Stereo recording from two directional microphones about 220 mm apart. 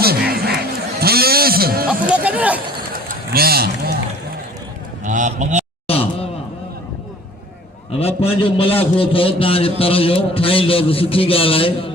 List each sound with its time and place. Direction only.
0.0 s a sound: 45° right (ahead or behind)
1.9 s music: 5° right (ahead or behind)
3.1 s run: 45° right (ahead or behind)
5.0 s honk: 35° right (ahead or behind)
5.9 s wail: 25° left (ahead or behind)
7.9 s a man's voice: 25° left (ahead or behind)